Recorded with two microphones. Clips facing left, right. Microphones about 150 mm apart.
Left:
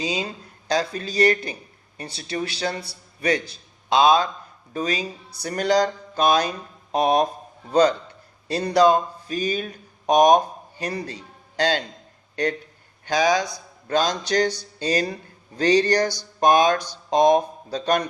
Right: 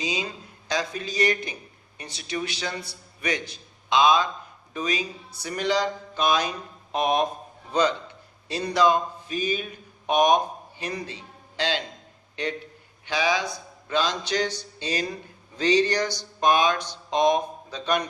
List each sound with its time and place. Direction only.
0.0 s a man's voice: 35° left (ahead or behind)